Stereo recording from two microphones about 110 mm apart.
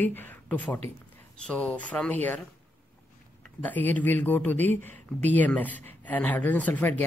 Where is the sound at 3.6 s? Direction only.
15° left (ahead or behind).